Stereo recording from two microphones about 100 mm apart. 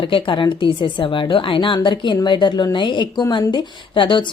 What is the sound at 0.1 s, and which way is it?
A woman's voice, 55° left (ahead or behind).